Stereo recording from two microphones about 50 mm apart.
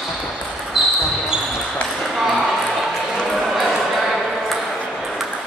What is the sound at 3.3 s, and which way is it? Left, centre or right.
Ping, centre.